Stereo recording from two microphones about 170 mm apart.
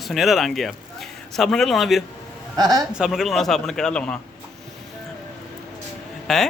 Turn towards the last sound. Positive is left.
turn(degrees=0)  # may be behind; listen again after turning